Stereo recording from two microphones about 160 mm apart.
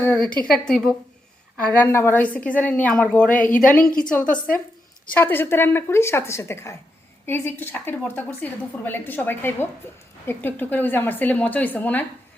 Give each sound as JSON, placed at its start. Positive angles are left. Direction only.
{"t": 0.0, "sound": "a sound", "side_deg": 10}
{"t": 0.5, "sound": "a woman's voice", "side_deg": 5}
{"t": 1.7, "sound": "a woman's voice", "side_deg": 15}
{"t": 3.4, "sound": "a woman's voice", "side_deg": 55}
{"t": 4.1, "sound": "a woman's voice", "side_deg": 10}